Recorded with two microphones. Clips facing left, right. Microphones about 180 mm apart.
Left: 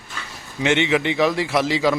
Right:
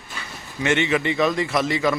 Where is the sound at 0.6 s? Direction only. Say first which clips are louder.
Left 2 dB; 80° left.